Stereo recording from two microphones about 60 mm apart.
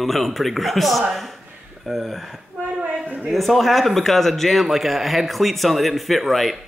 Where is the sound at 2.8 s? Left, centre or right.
Right.